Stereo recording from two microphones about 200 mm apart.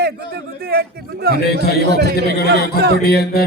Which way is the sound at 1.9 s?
55° right (ahead or behind).